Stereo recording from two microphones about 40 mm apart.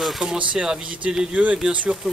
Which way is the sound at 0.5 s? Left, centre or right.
Right.